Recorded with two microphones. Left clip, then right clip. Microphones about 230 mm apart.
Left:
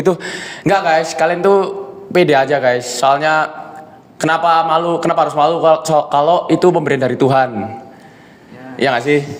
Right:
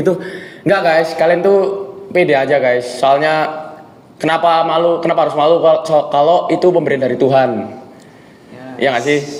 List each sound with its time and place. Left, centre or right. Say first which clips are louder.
0.0 s a man's voice: even; left
8.8 s a man's voice: even; left